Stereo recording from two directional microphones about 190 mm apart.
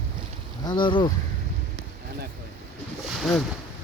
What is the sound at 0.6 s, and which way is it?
Speech, 25° left (ahead or behind).